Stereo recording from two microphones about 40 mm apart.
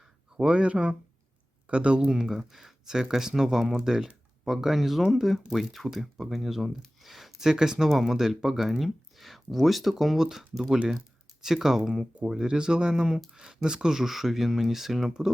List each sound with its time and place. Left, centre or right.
0.5 s speech: right; by 12.0 s centre
12.4 s speech: right; by 15.1 s centre